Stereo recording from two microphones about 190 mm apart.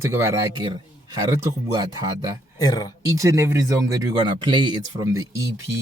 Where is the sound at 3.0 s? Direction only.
15° right (ahead or behind).